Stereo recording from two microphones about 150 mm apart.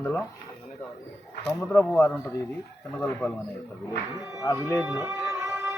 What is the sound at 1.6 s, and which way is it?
Speech, 10° left (ahead or behind).